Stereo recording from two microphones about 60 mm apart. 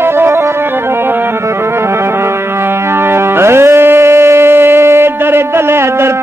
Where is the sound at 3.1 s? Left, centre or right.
Right.